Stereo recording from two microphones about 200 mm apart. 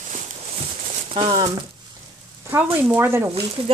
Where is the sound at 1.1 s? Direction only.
20° right (ahead or behind).